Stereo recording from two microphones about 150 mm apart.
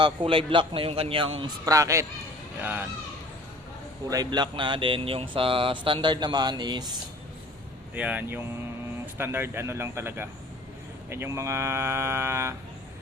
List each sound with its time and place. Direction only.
0.0 s speech: 35° right (ahead or behind)
1.6 s speech: 20° right (ahead or behind)
4.1 s speech: 30° right (ahead or behind)
7.9 s speech: 10° right (ahead or behind)